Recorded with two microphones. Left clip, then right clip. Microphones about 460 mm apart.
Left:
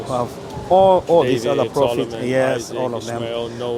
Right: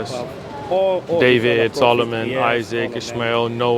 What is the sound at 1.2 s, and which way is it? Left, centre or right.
Speech, right.